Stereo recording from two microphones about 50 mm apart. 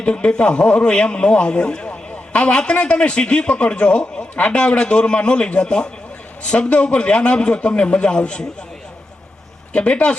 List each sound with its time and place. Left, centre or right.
0.0 s a man's voice: left
9.7 s a man's voice: left